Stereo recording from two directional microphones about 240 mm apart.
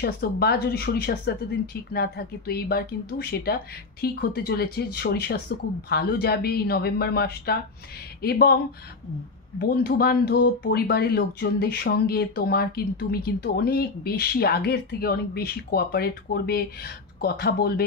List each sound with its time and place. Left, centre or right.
0.0 s speech: left
9.6 s speech: left